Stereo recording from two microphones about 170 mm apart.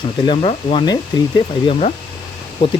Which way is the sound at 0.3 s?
30° left (ahead or behind).